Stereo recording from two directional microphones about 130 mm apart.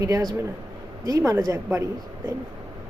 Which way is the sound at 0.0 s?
25° right (ahead or behind).